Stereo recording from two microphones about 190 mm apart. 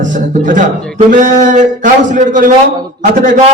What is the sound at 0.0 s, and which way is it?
A man's voice, 40° right (ahead or behind).